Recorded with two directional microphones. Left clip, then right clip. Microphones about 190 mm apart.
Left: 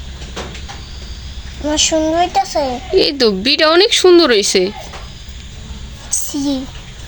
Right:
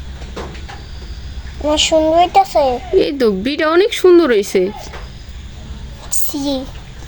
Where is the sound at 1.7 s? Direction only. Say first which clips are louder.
Right 2 dB; 20° right (ahead or behind).